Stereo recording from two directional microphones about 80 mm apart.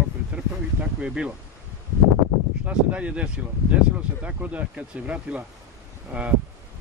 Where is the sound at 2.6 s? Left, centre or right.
Centre.